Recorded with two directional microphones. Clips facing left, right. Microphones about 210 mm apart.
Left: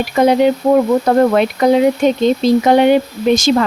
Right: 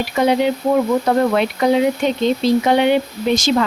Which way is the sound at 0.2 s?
45° left (ahead or behind).